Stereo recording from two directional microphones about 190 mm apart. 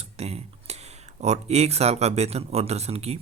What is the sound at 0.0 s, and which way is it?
Speech, 35° right (ahead or behind).